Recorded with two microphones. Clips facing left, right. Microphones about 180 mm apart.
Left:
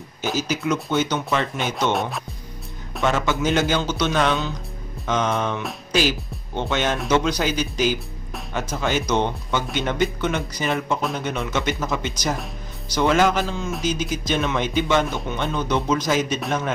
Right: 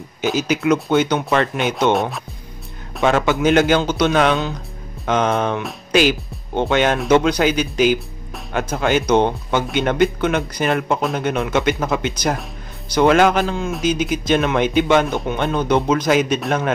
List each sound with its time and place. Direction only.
0.4 s speech: 60° right (ahead or behind)
2.0 s speech: centre (ahead or behind)
3.0 s speech: 60° right (ahead or behind)